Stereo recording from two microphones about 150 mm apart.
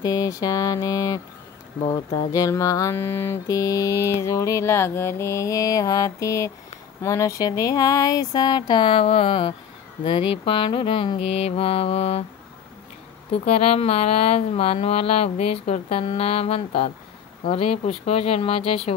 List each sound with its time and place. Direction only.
0.0 s mantra: 25° left (ahead or behind)
10.0 s speech: 35° left (ahead or behind)
13.5 s speech: 40° left (ahead or behind)